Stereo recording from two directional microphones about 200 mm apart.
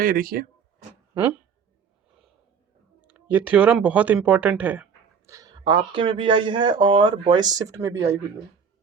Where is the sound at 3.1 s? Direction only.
10° right (ahead or behind).